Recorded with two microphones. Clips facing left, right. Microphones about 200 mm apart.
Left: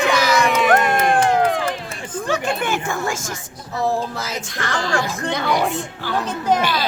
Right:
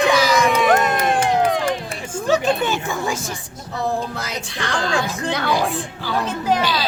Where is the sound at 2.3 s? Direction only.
20° right (ahead or behind).